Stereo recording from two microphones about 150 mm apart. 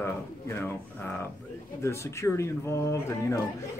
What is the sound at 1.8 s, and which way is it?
Speech, 20° left (ahead or behind).